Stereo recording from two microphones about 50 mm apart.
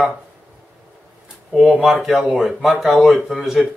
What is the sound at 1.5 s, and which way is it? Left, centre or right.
Speech, centre.